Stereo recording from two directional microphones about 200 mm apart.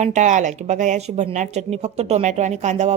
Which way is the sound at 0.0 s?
35° right (ahead or behind).